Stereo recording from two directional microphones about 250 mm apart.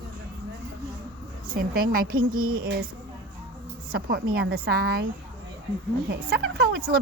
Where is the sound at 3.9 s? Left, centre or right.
Right.